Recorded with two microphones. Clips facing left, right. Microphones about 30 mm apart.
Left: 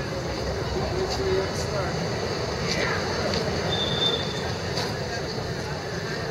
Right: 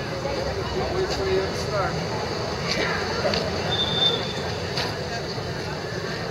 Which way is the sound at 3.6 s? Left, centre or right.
Centre.